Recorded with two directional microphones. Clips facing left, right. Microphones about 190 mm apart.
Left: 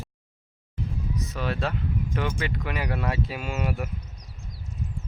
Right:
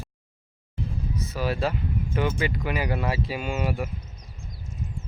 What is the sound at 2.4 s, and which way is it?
Music, 5° right (ahead or behind).